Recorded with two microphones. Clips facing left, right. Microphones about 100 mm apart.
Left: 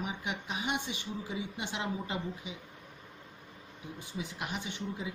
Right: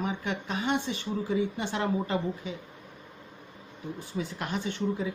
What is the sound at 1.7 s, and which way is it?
Speech, 50° right (ahead or behind).